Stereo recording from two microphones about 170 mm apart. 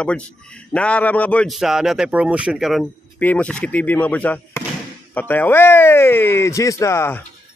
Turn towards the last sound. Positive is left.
turn(degrees=15)  # may be behind; listen again after turning